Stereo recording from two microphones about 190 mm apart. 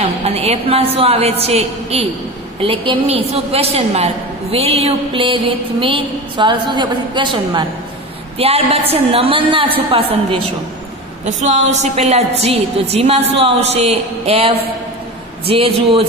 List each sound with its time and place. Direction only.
0.2 s a woman's voice: 30° right (ahead or behind)
11.4 s a woman's voice: 40° right (ahead or behind)